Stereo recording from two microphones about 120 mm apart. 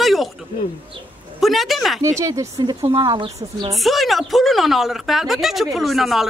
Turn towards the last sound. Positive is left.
turn(degrees=0)  # may be behind; listen again after turning